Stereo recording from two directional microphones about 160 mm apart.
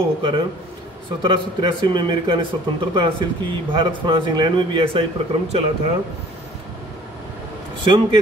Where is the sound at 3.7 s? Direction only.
30° right (ahead or behind).